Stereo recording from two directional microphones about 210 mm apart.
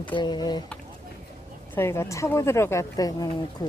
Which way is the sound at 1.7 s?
10° left (ahead or behind).